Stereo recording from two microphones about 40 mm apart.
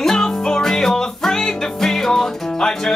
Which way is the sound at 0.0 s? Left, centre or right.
Centre.